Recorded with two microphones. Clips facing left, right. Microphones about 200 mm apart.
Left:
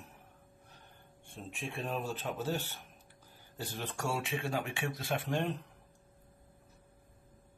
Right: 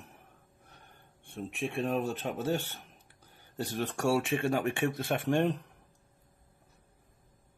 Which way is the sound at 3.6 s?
65° right (ahead or behind).